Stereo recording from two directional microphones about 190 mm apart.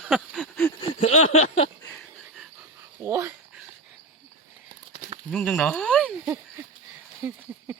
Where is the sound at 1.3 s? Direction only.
35° left (ahead or behind).